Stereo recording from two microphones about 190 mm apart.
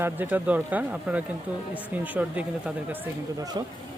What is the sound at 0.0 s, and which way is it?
Speech, 10° right (ahead or behind).